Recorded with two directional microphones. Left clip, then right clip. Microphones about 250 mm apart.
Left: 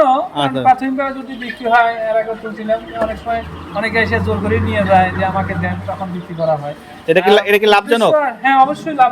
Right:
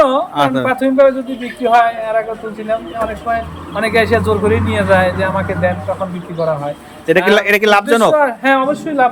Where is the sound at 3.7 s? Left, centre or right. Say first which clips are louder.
Right 3 dB; centre.